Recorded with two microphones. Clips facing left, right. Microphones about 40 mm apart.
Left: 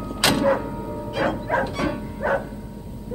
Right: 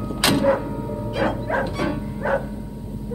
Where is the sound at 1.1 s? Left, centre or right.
Centre.